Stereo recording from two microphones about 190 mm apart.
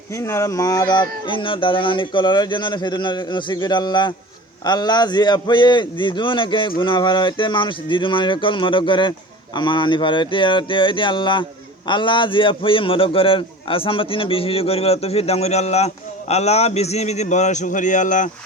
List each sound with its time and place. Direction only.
0.1 s a man's voice: 15° left (ahead or behind); by 18.3 s 40° left (ahead or behind)